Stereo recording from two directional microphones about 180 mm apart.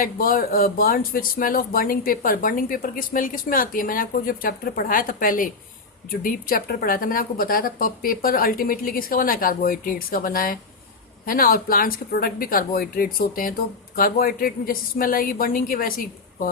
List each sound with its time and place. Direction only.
0.0 s speech: 50° left (ahead or behind)